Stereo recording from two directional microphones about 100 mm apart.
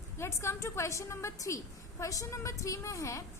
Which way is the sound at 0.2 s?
25° left (ahead or behind).